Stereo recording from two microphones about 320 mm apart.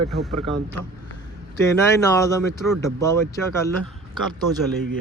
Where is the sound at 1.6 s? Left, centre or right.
Centre.